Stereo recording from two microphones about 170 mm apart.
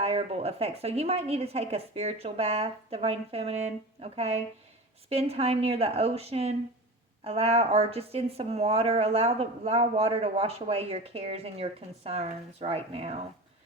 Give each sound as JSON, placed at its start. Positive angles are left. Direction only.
{"t": 0.0, "sound": "speech", "side_deg": -35}